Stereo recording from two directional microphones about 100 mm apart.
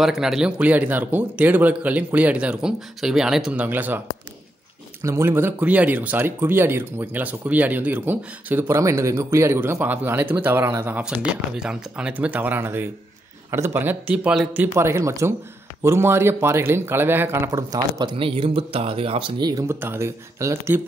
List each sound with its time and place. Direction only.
0.0 s a man's voice: 5° right (ahead or behind)
3.6 s a man's voice: 20° right (ahead or behind)
5.0 s speech: 25° right (ahead or behind)
11.0 s a man's voice: 10° right (ahead or behind)
14.5 s speech: 20° right (ahead or behind)
17.5 s speech: 40° right (ahead or behind)
18.1 s speech: 65° right (ahead or behind)
19.5 s speech: 25° right (ahead or behind)